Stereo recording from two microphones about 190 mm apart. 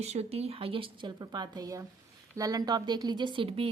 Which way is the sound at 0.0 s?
35° right (ahead or behind).